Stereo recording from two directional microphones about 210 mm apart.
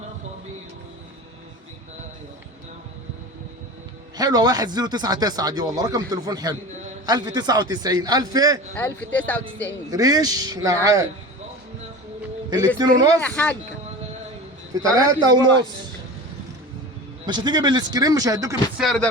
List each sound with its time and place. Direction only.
4.2 s speech: 20° right (ahead or behind)
8.7 s speech: 5° left (ahead or behind)
9.9 s speech: 20° right (ahead or behind)
12.5 s speech: 15° right (ahead or behind)
13.2 s speech: 10° left (ahead or behind)
14.7 s speech: 15° right (ahead or behind)
17.2 s speech: 20° right (ahead or behind)
18.8 s speech: centre (ahead or behind)